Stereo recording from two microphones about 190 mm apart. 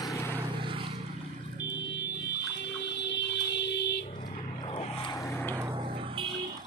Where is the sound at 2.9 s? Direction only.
65° left (ahead or behind).